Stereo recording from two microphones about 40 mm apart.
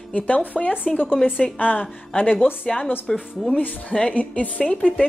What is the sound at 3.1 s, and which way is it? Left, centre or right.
Speech, centre.